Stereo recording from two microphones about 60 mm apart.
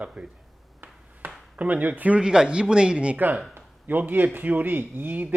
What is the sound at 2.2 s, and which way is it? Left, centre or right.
Speech, centre.